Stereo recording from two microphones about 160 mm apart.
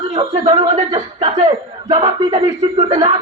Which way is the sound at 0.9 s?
40° right (ahead or behind).